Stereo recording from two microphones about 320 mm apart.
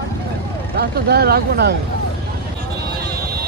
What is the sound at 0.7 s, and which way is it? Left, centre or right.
Speech, right.